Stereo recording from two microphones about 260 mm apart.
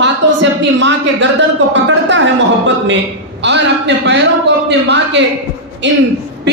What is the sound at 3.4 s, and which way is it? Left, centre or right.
A man's voice, right.